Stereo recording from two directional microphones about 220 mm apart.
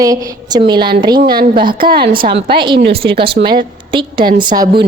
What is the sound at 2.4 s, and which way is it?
Speech, 20° right (ahead or behind).